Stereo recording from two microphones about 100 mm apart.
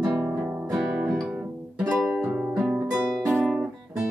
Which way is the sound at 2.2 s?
15° right (ahead or behind).